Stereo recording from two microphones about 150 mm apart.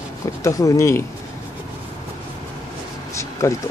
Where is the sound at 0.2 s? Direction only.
20° left (ahead or behind).